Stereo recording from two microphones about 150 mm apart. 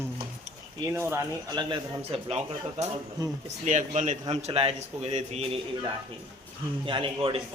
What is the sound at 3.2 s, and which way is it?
Speech, 25° right (ahead or behind).